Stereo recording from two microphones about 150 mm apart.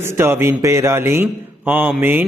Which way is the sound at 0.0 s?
15° right (ahead or behind).